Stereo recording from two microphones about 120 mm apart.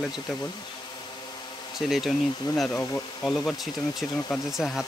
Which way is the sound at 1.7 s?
Centre (ahead or behind).